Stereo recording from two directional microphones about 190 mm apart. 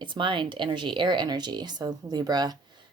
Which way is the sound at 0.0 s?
25° right (ahead or behind).